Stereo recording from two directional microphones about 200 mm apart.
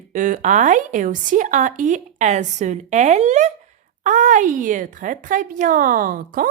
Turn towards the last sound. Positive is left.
turn(degrees=-45)  # may be behind; listen again after turning